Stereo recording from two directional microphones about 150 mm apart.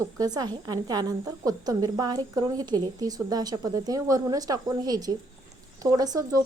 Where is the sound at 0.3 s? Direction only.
25° right (ahead or behind).